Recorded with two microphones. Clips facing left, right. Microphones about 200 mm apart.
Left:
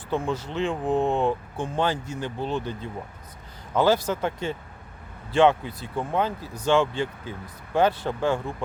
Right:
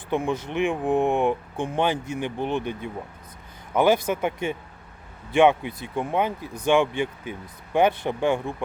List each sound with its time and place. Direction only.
0.1 s speech: 15° right (ahead or behind)